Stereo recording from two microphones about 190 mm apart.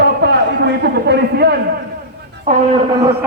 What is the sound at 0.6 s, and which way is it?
Speech, 60° right (ahead or behind).